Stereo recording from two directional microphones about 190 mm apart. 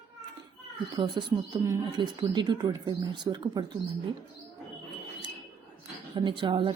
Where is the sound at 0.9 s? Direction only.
20° right (ahead or behind).